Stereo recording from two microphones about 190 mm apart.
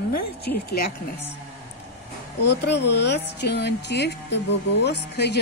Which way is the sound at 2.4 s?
60° left (ahead or behind).